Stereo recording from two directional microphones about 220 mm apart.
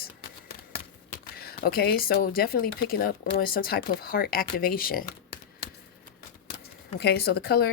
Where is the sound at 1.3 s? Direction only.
45° left (ahead or behind).